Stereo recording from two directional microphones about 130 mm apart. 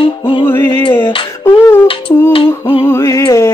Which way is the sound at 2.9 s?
20° left (ahead or behind).